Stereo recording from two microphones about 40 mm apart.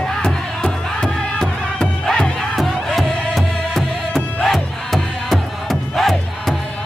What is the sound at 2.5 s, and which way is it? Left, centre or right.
Music, centre.